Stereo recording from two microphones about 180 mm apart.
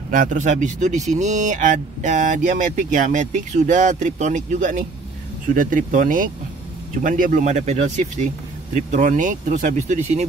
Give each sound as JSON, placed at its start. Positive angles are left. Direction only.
{"t": 0.1, "sound": "speech", "side_deg": -45}